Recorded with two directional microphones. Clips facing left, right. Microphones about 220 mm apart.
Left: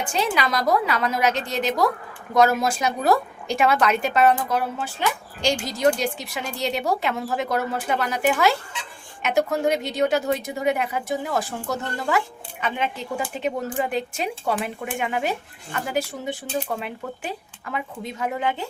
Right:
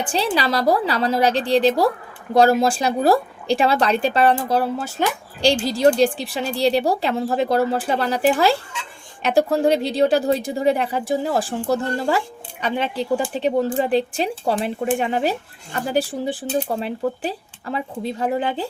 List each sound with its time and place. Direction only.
0.0 s a woman's voice: 35° right (ahead or behind)